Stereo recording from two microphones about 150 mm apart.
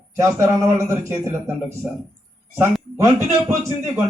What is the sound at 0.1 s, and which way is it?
A man's voice, 20° right (ahead or behind).